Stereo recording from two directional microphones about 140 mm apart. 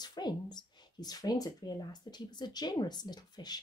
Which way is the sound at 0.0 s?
30° left (ahead or behind).